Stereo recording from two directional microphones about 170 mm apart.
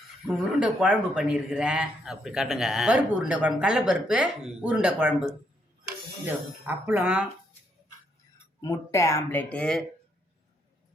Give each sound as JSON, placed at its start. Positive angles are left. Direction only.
{"t": 0.3, "sound": "speech", "side_deg": -5}
{"t": 8.6, "sound": "speech", "side_deg": 20}